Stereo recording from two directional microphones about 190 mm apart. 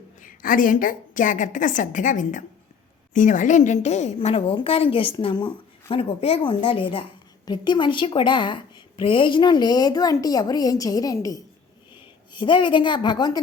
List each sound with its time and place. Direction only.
0.2 s a woman's voice: 45° left (ahead or behind); by 13.4 s 20° left (ahead or behind)